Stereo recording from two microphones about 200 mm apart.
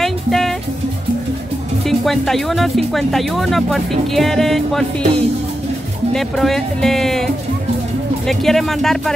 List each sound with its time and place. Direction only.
0.0 s music: centre (ahead or behind)
1.9 s speech: centre (ahead or behind)
8.3 s speech: centre (ahead or behind)